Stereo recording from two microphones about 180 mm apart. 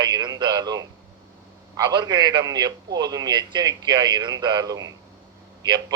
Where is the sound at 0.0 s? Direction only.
25° right (ahead or behind).